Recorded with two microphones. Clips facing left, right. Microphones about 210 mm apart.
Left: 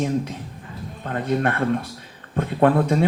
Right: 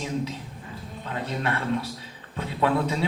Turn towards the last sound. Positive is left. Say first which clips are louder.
# left 7 dB
turn(degrees=50)  # may be behind; listen again after turning